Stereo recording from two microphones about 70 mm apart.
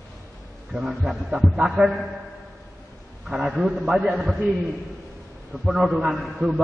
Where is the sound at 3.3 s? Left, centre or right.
Right.